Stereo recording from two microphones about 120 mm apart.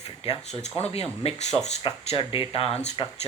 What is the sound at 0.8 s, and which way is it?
Speech, 60° left (ahead or behind).